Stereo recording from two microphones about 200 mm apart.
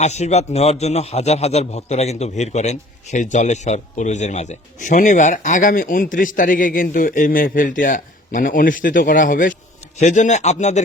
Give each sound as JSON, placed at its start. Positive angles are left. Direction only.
{"t": 0.0, "sound": "a man's voice", "side_deg": 35}